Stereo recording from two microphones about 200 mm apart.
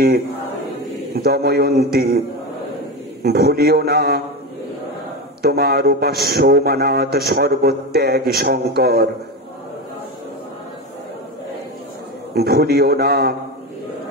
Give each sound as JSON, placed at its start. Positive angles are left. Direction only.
{"t": 1.1, "sound": "a man's voice", "side_deg": -50}
{"t": 3.3, "sound": "a man's voice", "side_deg": -50}
{"t": 5.4, "sound": "a man's voice", "side_deg": -50}
{"t": 12.4, "sound": "a man's voice", "side_deg": -50}